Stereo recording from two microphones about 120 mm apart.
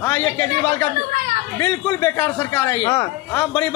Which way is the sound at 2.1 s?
15° left (ahead or behind).